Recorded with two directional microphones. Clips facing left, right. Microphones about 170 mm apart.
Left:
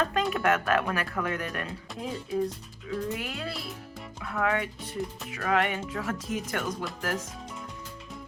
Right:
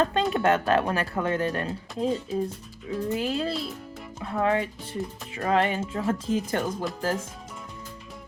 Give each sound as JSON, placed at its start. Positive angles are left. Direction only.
{"t": 0.0, "sound": "speech", "side_deg": -25}